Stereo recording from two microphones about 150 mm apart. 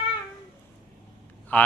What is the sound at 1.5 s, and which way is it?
Speech, 10° left (ahead or behind).